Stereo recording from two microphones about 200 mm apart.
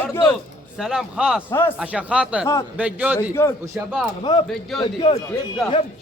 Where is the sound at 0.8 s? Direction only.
Centre (ahead or behind).